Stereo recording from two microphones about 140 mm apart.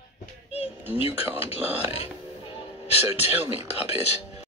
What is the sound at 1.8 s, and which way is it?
Music, 45° left (ahead or behind).